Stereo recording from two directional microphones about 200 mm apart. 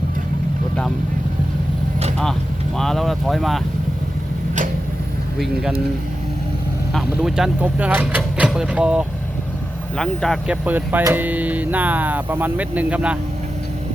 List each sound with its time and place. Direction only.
2.7 s speech: centre (ahead or behind)
6.9 s speech: centre (ahead or behind)